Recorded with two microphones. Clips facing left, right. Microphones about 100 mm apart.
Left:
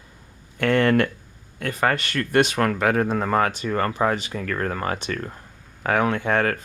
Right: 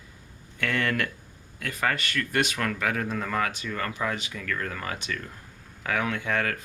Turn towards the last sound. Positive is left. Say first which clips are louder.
# left 6 dB
turn(degrees=45)  # may be behind; listen again after turning